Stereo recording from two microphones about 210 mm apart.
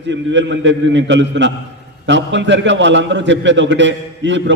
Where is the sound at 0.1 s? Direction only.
60° right (ahead or behind).